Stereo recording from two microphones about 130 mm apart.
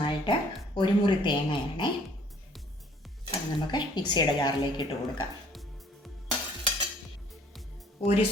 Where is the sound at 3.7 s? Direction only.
35° left (ahead or behind).